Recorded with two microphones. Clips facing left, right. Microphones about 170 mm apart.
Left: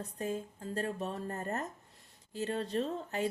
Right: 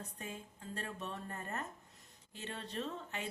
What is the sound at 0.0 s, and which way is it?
Speech, 40° left (ahead or behind).